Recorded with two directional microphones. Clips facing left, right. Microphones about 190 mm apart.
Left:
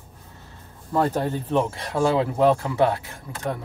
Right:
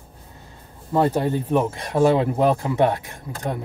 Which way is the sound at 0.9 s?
15° right (ahead or behind).